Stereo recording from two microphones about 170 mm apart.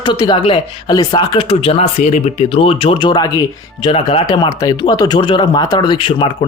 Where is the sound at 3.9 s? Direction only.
35° left (ahead or behind).